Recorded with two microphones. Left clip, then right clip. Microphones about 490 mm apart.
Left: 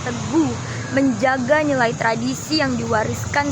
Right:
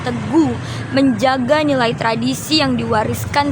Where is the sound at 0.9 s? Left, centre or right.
Left.